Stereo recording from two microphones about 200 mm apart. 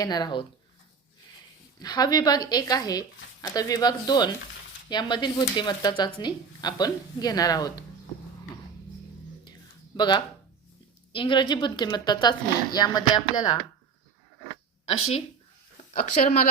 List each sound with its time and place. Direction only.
0.0 s a woman's voice: 20° left (ahead or behind)
1.8 s a woman's voice: 20° left (ahead or behind)
10.0 s a woman's voice: 20° left (ahead or behind)
16.2 s speech: 35° left (ahead or behind)